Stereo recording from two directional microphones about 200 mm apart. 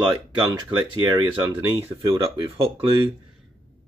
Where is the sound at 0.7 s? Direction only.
25° right (ahead or behind).